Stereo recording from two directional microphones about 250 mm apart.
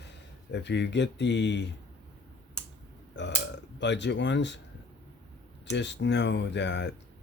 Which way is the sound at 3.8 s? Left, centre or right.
Left.